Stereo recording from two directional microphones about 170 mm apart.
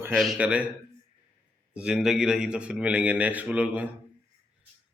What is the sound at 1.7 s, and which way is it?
A man's voice, 5° right (ahead or behind).